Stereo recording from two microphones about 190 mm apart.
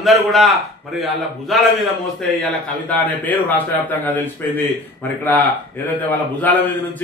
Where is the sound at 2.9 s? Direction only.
10° left (ahead or behind).